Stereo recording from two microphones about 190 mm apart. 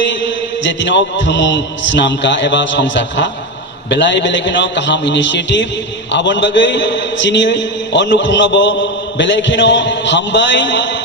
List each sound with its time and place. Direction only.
0.6 s a man's voice: 70° left (ahead or behind)